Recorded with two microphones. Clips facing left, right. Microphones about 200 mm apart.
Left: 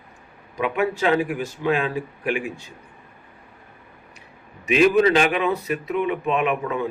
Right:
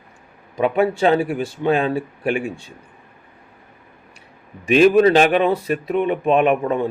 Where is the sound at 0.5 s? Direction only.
35° right (ahead or behind).